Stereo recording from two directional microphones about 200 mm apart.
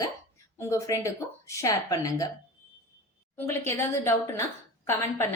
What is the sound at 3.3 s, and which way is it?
Speech, 10° left (ahead or behind).